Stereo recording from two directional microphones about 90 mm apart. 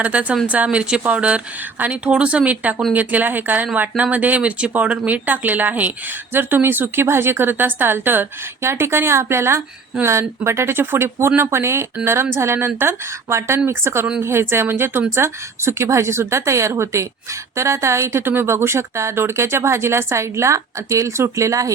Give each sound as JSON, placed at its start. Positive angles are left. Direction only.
{"t": 0.0, "sound": "speech", "side_deg": -15}